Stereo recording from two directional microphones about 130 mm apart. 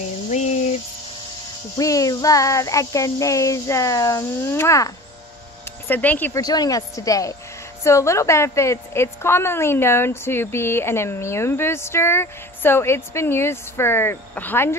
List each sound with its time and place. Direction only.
0.3 s a sound: 65° left (ahead or behind)
1.8 s a woman's voice: 25° left (ahead or behind)
6.3 s a woman's voice: 30° left (ahead or behind)